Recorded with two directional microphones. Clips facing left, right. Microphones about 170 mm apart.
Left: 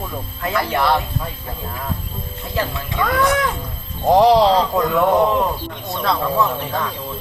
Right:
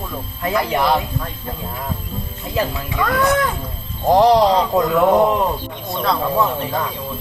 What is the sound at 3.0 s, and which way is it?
Speech, centre (ahead or behind).